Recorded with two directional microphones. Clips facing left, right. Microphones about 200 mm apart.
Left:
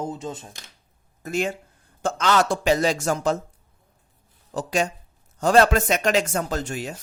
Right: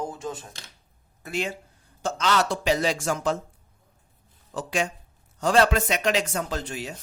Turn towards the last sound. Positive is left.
turn(degrees=45)  # may be behind; listen again after turning